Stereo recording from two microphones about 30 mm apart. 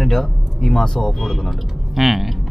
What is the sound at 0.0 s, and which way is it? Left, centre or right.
Speech, centre.